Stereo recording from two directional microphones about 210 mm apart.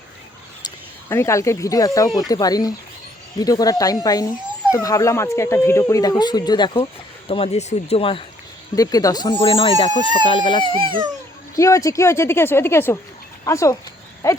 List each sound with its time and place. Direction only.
0.6 s speech: 10° left (ahead or behind)
10.6 s speech: 25° right (ahead or behind)
11.5 s speech: 15° left (ahead or behind)